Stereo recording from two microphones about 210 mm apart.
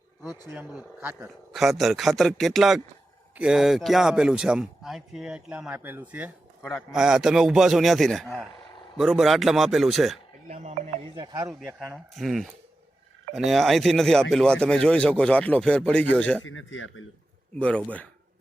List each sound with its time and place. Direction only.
0.4 s speech: 10° right (ahead or behind)
6.6 s a man's voice: 10° left (ahead or behind)
6.9 s speech: 5° right (ahead or behind)
10.5 s speech: 30° right (ahead or behind)
11.6 s speech: 5° right (ahead or behind)
16.4 s speech: 70° left (ahead or behind)
17.6 s speech: 5° left (ahead or behind)